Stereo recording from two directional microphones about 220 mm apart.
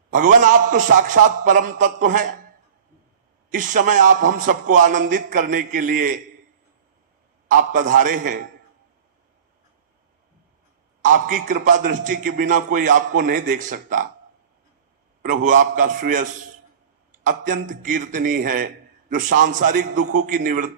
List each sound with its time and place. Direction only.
0.1 s a man's voice: 35° right (ahead or behind)
3.5 s a man's voice: 35° right (ahead or behind)
7.5 s a man's voice: 35° right (ahead or behind)
11.0 s a man's voice: 35° right (ahead or behind)
15.4 s a man's voice: 35° right (ahead or behind)